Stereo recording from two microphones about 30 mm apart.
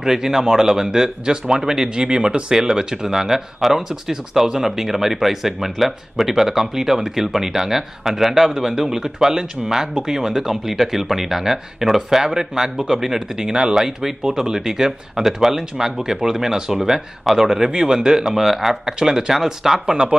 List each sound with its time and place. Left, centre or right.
0.0 s speech: centre
2.5 s speech: centre